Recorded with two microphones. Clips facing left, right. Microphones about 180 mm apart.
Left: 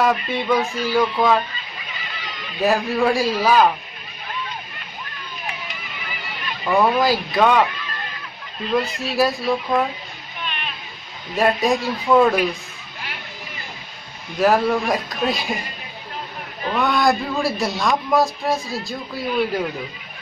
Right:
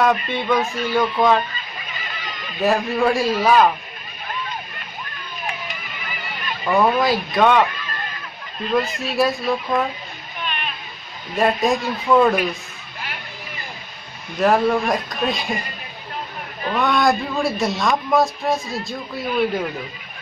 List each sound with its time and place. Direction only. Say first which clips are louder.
0.3 s speech: even; centre (ahead or behind)
1.5 s a sound: right 2 dB; 50° right (ahead or behind)
2.6 s speech: even; centre (ahead or behind)
5.5 s a sound: right 2 dB; 50° right (ahead or behind)
6.7 s speech: even; centre (ahead or behind)
7.7 s sheep: right 1 dB; 45° right (ahead or behind)
8.7 s speech: even; centre (ahead or behind)
10.4 s a sound: right 2 dB; 45° right (ahead or behind)
11.3 s speech: even; centre (ahead or behind)
14.4 s speech: even; centre (ahead or behind)
16.7 s speech: even; centre (ahead or behind)